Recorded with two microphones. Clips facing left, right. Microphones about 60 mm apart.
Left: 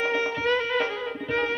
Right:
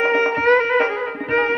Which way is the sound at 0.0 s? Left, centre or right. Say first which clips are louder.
Right 8 dB; right.